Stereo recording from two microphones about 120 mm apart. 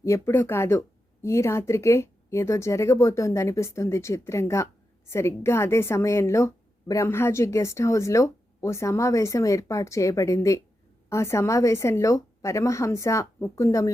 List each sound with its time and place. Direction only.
0.0 s speech: 25° left (ahead or behind)